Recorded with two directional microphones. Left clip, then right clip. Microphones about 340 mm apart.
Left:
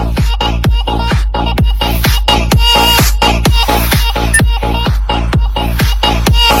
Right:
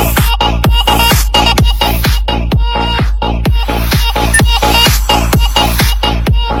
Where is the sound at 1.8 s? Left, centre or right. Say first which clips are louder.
Right 2 dB; centre.